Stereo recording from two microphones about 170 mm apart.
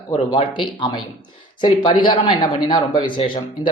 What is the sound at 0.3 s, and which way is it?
A man's voice, 30° left (ahead or behind).